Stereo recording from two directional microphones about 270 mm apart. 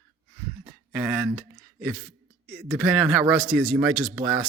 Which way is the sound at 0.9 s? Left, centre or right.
Centre.